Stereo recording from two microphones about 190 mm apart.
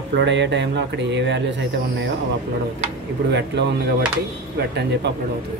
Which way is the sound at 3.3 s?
65° right (ahead or behind).